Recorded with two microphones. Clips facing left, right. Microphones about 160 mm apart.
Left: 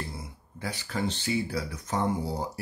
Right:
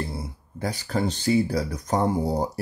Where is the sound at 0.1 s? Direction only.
40° right (ahead or behind).